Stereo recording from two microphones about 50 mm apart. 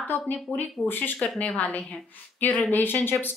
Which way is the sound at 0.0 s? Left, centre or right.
Left.